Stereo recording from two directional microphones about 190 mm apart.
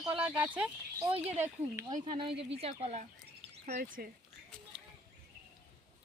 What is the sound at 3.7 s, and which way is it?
Speech, 50° right (ahead or behind).